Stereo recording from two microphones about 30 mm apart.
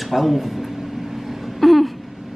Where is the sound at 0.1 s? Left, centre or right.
Centre.